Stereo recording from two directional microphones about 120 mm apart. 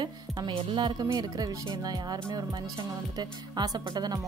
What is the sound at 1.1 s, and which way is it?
Music, 30° right (ahead or behind).